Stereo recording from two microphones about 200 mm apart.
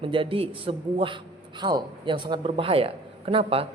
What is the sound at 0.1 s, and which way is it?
Speech, 25° right (ahead or behind).